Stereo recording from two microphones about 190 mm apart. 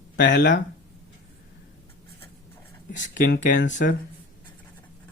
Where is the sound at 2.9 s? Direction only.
40° left (ahead or behind).